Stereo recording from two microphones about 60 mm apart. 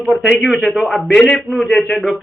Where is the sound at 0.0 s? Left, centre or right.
Centre.